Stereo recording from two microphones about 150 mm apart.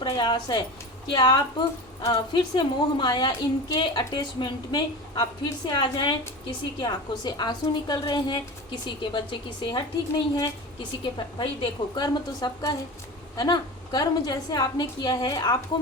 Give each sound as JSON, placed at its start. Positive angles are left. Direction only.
{"t": 0.0, "sound": "a woman's voice", "side_deg": 30}
{"t": 11.0, "sound": "a woman's voice", "side_deg": 35}